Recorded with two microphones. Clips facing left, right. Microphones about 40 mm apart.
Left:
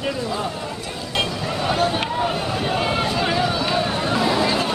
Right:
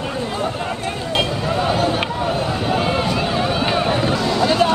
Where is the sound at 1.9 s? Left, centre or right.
Centre.